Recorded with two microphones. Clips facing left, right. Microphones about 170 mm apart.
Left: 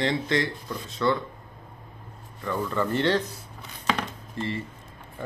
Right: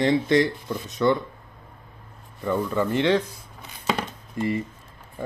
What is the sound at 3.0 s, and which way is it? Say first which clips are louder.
Speech: right 4 dB; 10° right (ahead or behind).